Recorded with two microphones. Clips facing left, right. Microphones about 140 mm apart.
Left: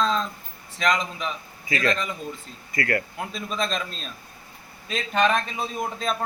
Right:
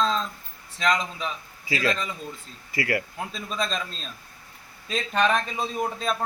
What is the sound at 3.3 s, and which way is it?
Speech, centre (ahead or behind).